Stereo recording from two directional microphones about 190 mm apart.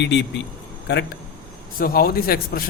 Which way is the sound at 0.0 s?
65° left (ahead or behind).